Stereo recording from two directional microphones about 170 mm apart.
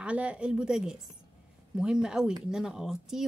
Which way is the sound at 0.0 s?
5° right (ahead or behind).